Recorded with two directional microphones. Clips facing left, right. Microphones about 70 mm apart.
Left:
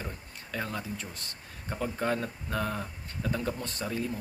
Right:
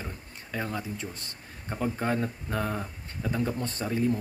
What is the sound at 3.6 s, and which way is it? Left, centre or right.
Speech, right.